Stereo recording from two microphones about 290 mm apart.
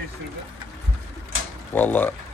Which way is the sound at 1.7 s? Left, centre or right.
Centre.